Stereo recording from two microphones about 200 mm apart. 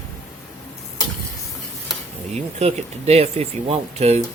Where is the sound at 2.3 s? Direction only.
30° right (ahead or behind).